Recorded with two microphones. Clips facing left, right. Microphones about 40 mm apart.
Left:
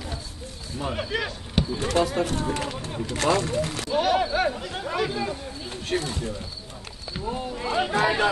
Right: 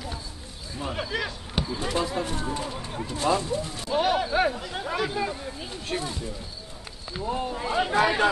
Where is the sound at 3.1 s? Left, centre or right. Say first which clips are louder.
Left 2 dB; left.